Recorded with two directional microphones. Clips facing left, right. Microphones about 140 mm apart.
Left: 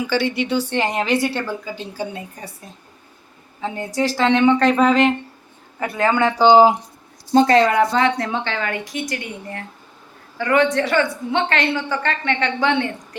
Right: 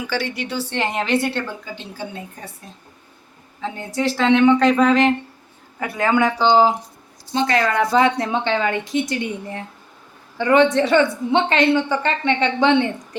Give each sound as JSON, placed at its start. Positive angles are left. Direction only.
{"t": 0.1, "sound": "a woman's voice", "side_deg": 0}
{"t": 3.6, "sound": "a woman's voice", "side_deg": 0}
{"t": 5.8, "sound": "speech", "side_deg": -10}
{"t": 6.4, "sound": "speech", "side_deg": 15}
{"t": 7.3, "sound": "speech", "side_deg": 40}
{"t": 7.9, "sound": "a woman's voice", "side_deg": -20}